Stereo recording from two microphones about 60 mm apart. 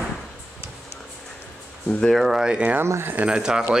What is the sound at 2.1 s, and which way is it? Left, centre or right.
Speech, centre.